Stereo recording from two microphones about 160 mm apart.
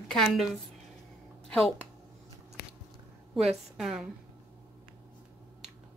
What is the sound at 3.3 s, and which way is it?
Speech, centre (ahead or behind).